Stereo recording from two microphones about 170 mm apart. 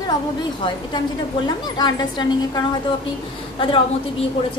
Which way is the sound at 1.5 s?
25° left (ahead or behind).